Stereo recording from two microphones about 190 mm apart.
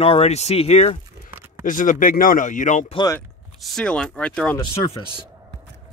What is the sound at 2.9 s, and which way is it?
Speech, 20° left (ahead or behind).